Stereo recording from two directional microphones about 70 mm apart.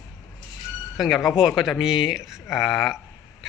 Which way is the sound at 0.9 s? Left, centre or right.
Centre.